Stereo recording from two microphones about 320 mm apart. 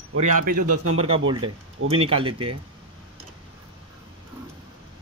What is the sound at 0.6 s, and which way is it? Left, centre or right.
Speech, right.